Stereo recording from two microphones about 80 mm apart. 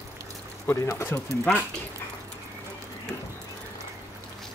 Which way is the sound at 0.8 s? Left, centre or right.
Left.